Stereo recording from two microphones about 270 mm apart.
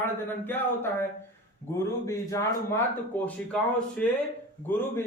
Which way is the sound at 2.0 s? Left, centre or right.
Centre.